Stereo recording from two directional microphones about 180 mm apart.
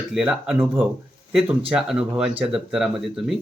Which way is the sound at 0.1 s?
5° right (ahead or behind).